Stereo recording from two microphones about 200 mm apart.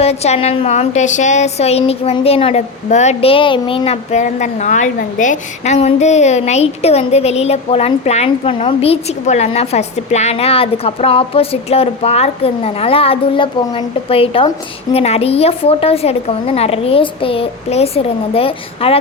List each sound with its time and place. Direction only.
0.0 s a child's voice: 30° left (ahead or behind)